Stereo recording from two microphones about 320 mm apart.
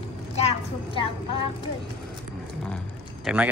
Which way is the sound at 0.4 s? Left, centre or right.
Centre.